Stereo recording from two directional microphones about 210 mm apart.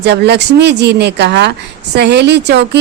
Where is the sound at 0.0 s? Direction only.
55° right (ahead or behind).